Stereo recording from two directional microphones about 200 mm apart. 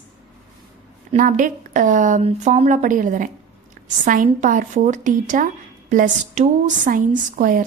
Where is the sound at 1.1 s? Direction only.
40° right (ahead or behind).